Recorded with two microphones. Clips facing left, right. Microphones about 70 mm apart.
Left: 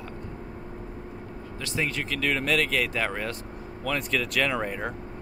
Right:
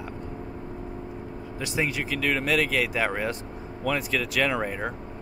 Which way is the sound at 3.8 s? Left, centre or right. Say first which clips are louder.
Right 1 dB; centre.